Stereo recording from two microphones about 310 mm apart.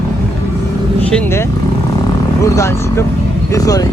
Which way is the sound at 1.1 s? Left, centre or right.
Centre.